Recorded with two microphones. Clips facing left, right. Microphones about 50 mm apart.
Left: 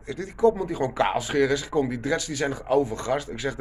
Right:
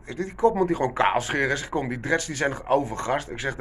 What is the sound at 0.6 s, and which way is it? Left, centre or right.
Speech, right.